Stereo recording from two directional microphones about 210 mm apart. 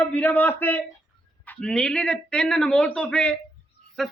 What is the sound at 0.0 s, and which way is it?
A man's voice, 10° left (ahead or behind).